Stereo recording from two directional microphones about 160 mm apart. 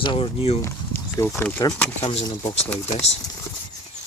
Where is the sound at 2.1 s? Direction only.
40° left (ahead or behind).